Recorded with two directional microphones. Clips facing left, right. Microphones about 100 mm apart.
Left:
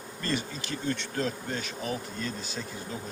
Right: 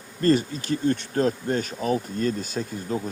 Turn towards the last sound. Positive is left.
turn(degrees=-45)  # may be behind; listen again after turning